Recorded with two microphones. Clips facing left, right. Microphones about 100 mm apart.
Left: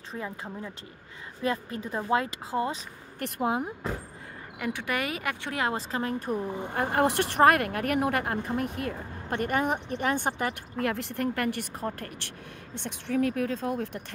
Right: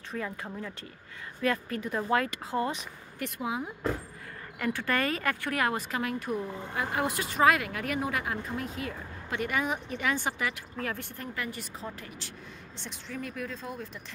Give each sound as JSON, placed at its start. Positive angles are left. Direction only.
{"t": 0.1, "sound": "speech", "side_deg": 25}
{"t": 3.2, "sound": "speech", "side_deg": 50}
{"t": 4.6, "sound": "speech", "side_deg": 15}
{"t": 6.4, "sound": "speech", "side_deg": 20}
{"t": 6.7, "sound": "speech", "side_deg": 55}